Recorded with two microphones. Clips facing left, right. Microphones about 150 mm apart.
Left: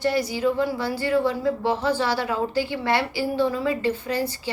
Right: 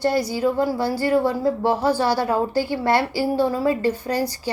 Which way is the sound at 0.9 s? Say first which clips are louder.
Right 4 dB; 35° right (ahead or behind).